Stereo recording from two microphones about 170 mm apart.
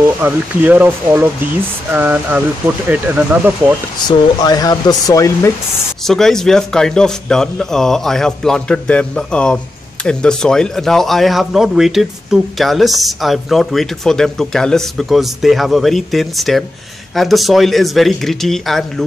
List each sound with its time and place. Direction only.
0.2 s speech: 10° right (ahead or behind)
4.1 s speech: 25° left (ahead or behind)
6.0 s speech: centre (ahead or behind)